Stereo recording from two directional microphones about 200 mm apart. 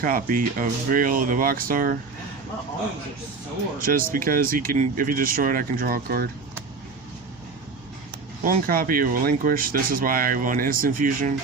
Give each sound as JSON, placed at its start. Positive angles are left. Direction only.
{"t": 0.0, "sound": "speech", "side_deg": -45}
{"t": 3.8, "sound": "speech", "side_deg": -45}
{"t": 8.4, "sound": "speech", "side_deg": -45}